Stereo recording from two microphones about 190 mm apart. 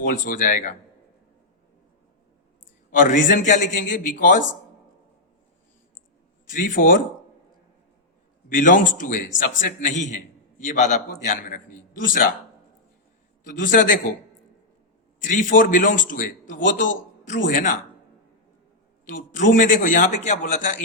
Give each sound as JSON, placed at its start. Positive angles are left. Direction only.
{"t": 0.0, "sound": "a man's voice", "side_deg": 45}
{"t": 2.9, "sound": "a man's voice", "side_deg": 45}
{"t": 6.5, "sound": "a man's voice", "side_deg": 45}
{"t": 8.4, "sound": "a man's voice", "side_deg": 45}
{"t": 13.4, "sound": "a man's voice", "side_deg": 45}
{"t": 15.2, "sound": "a man's voice", "side_deg": 40}
{"t": 19.0, "sound": "a man's voice", "side_deg": 45}